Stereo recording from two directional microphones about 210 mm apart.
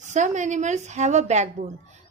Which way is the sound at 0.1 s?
35° right (ahead or behind).